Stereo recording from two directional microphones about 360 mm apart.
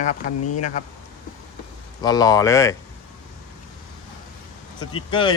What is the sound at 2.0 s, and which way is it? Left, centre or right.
Speech, centre.